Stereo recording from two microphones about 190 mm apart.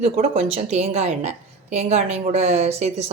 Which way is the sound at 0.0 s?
30° right (ahead or behind).